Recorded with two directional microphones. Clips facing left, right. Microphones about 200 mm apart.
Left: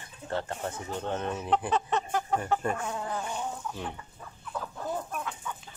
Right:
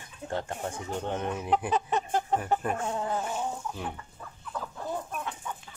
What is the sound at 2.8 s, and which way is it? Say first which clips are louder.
Fowl: right 3 dB; 25° right (ahead or behind).